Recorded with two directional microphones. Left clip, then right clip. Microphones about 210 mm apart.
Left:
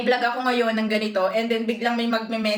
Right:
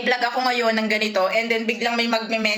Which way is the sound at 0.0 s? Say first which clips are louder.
Right 1 dB; 15° left (ahead or behind).